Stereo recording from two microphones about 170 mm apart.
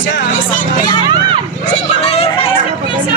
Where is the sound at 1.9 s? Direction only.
35° left (ahead or behind).